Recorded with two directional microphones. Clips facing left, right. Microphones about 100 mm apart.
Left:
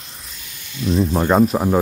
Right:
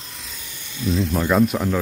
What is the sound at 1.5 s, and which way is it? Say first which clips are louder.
Speech: left 4 dB; 30° left (ahead or behind).